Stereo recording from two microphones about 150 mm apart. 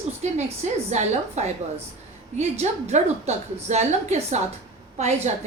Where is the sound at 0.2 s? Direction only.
50° right (ahead or behind).